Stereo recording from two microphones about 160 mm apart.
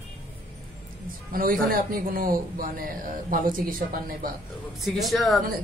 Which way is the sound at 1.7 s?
65° right (ahead or behind).